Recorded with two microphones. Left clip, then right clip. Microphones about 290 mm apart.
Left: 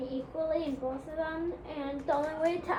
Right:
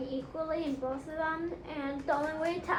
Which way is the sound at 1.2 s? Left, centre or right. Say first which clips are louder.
Right 2 dB; left.